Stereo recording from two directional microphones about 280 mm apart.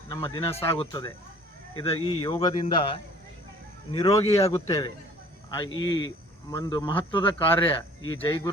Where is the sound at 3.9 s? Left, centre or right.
Centre.